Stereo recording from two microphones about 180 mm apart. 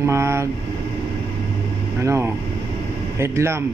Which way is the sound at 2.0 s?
15° right (ahead or behind).